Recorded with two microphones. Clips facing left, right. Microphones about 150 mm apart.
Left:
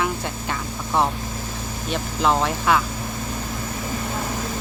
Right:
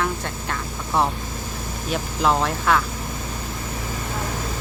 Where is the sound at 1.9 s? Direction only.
Centre (ahead or behind).